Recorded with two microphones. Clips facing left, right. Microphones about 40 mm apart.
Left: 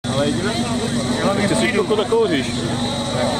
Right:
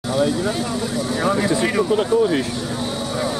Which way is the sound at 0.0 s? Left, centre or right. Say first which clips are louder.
Even; left.